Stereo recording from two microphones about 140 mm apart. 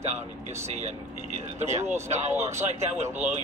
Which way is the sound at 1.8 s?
20° right (ahead or behind).